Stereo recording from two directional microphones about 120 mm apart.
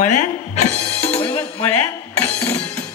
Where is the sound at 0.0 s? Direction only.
85° left; by 1.2 s 55° left (ahead or behind).